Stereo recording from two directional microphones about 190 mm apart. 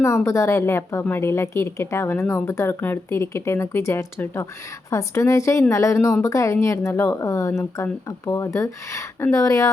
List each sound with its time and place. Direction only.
0.0 s a woman's voice: 15° left (ahead or behind)